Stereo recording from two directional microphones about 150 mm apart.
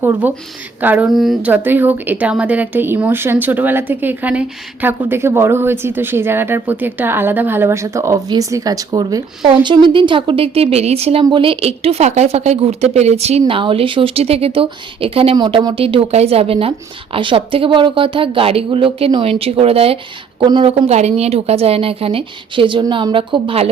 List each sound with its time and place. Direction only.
0.0 s speech: 15° right (ahead or behind)
1.1 s a woman's voice: centre (ahead or behind); by 23.6 s 35° right (ahead or behind)